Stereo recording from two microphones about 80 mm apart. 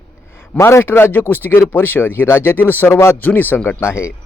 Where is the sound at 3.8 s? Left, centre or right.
Left.